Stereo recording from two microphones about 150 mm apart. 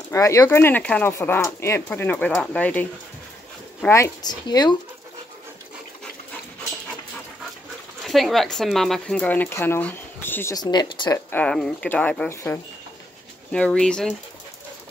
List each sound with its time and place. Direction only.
0.1 s speech: 20° left (ahead or behind)
3.9 s speech: 25° left (ahead or behind)
8.0 s speech: centre (ahead or behind)
10.5 s speech: 30° left (ahead or behind)
11.3 s speech: 5° left (ahead or behind)
13.5 s speech: 5° left (ahead or behind)